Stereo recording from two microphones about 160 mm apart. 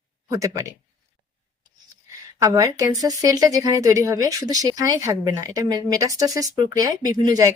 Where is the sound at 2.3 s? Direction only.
20° right (ahead or behind).